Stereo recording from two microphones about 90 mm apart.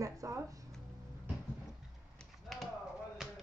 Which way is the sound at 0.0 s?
40° right (ahead or behind).